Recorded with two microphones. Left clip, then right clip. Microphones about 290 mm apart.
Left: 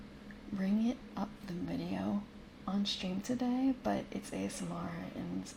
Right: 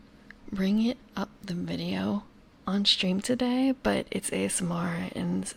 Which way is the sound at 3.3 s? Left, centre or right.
Right.